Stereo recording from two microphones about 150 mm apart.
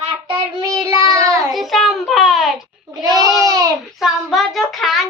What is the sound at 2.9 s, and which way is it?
Child singing, 25° right (ahead or behind).